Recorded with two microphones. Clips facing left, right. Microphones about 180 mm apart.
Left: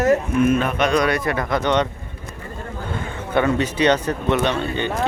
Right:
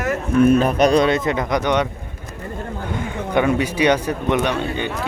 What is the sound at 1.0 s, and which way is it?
Speech, 25° right (ahead or behind).